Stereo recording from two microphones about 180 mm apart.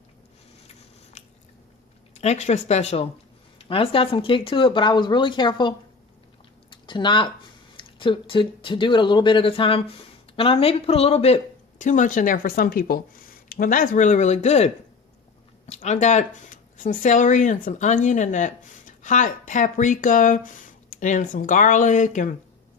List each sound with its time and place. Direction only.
1.2 s biting: 40° left (ahead or behind)
2.1 s a woman's voice: 35° left (ahead or behind)
6.7 s a sound: 25° left (ahead or behind)
7.8 s a woman's voice: 30° left (ahead or behind); by 22.3 s 45° left (ahead or behind)